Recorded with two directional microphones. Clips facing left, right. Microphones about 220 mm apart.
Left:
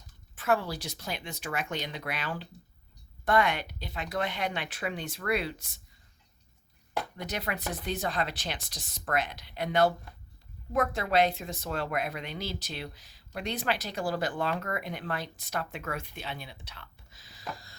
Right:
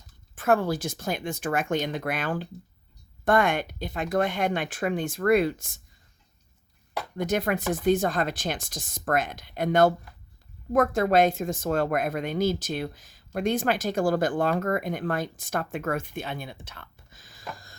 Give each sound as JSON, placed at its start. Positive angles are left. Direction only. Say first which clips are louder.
{"t": 0.3, "sound": "speech", "louder": "right 6 dB", "side_deg": -50}
{"t": 7.2, "sound": "speech", "louder": "right 14 dB", "side_deg": -50}